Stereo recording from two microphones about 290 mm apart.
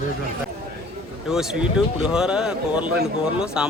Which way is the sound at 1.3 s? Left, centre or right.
Centre.